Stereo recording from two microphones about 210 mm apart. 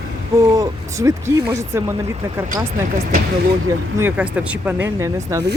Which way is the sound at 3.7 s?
10° right (ahead or behind).